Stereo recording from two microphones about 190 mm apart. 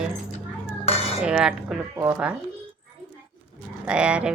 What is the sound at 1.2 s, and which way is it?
Speech, 5° right (ahead or behind).